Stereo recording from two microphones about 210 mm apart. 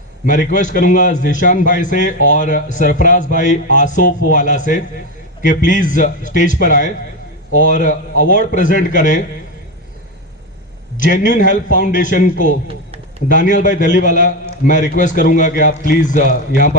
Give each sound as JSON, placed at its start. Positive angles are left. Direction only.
{"t": 0.3, "sound": "speech", "side_deg": 35}
{"t": 11.0, "sound": "speech", "side_deg": 35}